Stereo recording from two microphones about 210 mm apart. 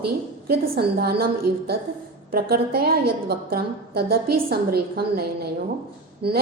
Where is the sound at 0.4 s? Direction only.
45° right (ahead or behind).